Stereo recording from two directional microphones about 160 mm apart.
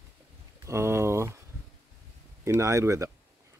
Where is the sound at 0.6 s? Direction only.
15° right (ahead or behind).